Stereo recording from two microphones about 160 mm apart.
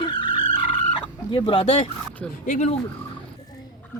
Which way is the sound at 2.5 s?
45° left (ahead or behind).